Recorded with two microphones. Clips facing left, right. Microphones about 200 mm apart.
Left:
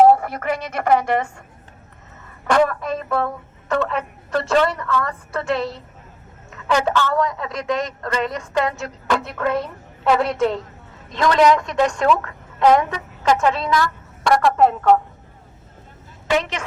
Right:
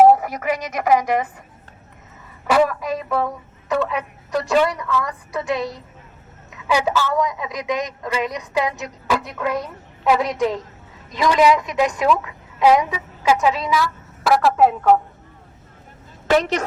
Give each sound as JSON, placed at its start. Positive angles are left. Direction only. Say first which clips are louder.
{"t": 0.0, "sound": "a woman's voice", "louder": "right 1 dB", "side_deg": -5}
{"t": 2.5, "sound": "a woman's voice", "louder": "even", "side_deg": -5}
{"t": 16.3, "sound": "a woman's voice", "louder": "right 4 dB", "side_deg": -40}